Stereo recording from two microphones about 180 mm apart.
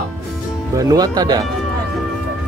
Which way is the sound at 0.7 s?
20° right (ahead or behind).